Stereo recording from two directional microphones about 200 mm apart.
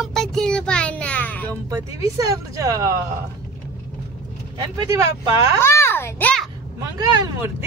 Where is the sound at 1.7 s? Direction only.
15° right (ahead or behind).